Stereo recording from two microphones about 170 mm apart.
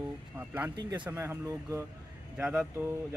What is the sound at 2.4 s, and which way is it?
Speech, 5° right (ahead or behind).